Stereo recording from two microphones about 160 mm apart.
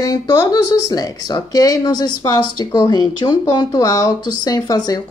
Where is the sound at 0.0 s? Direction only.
20° left (ahead or behind).